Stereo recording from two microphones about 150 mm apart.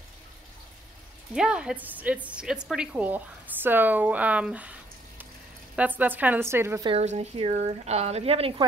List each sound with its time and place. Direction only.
1.3 s a woman's voice: 5° right (ahead or behind)
5.8 s a woman's voice: 10° right (ahead or behind)
7.0 s speech: 45° right (ahead or behind)